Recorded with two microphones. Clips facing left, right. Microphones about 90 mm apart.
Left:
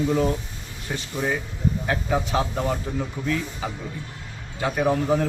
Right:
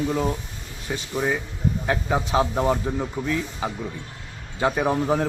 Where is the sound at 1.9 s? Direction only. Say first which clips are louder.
Right 2 dB; 20° right (ahead or behind).